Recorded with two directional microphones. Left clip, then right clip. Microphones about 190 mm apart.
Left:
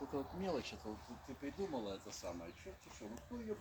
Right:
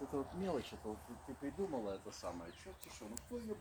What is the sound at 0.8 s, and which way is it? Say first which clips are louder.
Speech: right 2 dB; 50° right (ahead or behind).